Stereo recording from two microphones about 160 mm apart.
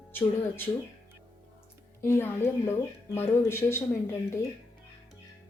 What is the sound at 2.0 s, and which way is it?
A woman's voice, 15° left (ahead or behind).